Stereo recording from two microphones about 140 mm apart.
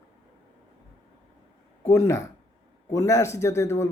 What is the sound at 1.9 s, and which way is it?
Speech, 20° left (ahead or behind).